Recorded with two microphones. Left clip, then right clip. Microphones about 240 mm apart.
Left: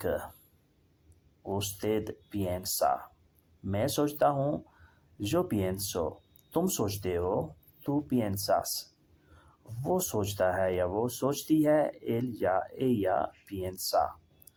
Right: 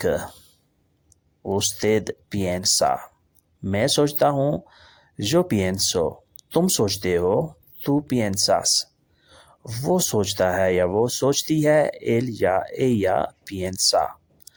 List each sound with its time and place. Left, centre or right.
0.0 s speech: right
1.5 s speech: right